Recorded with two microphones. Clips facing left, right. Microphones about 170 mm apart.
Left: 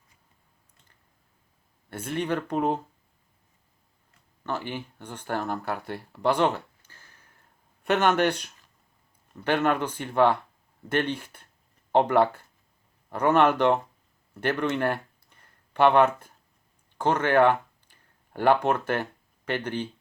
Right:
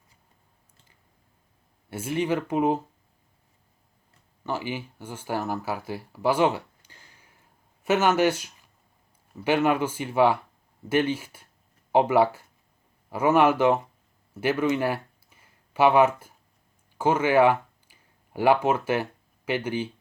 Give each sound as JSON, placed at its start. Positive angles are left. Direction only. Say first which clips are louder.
{"t": 1.9, "sound": "speech", "louder": "right 2 dB", "side_deg": -5}
{"t": 4.4, "sound": "speech", "louder": "right 2 dB", "side_deg": -10}